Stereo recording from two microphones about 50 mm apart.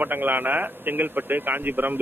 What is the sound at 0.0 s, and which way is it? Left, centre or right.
A man's voice, right.